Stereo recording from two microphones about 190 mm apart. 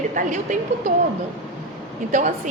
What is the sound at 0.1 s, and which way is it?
Speech, 45° right (ahead or behind).